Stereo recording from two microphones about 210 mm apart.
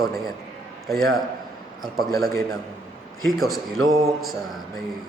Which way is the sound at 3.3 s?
Centre (ahead or behind).